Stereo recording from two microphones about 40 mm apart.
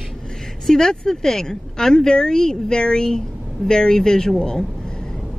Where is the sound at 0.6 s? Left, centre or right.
Centre.